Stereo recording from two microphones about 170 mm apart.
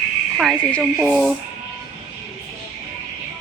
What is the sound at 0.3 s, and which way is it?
Speech, 5° right (ahead or behind).